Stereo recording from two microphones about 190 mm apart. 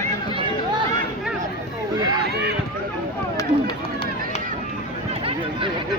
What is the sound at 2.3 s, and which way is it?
Speech, 60° right (ahead or behind).